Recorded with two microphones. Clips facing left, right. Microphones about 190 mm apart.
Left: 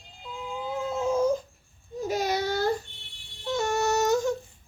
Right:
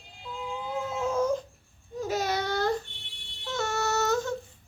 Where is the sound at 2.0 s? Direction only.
10° left (ahead or behind).